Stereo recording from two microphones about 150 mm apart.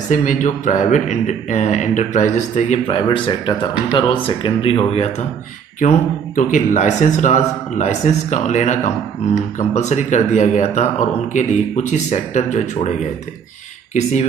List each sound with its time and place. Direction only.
0.1 s a man's voice: 60° left (ahead or behind)
2.9 s speech: 30° left (ahead or behind)
5.8 s a man's voice: 60° left (ahead or behind)